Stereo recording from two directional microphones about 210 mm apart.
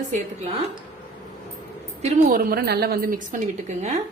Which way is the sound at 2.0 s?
40° right (ahead or behind).